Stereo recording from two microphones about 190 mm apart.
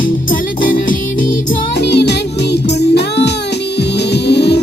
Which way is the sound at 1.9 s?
60° left (ahead or behind).